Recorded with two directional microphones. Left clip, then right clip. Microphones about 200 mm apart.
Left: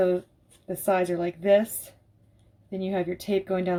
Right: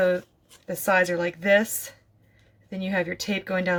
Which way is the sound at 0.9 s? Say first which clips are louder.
Right 3 dB; 40° right (ahead or behind).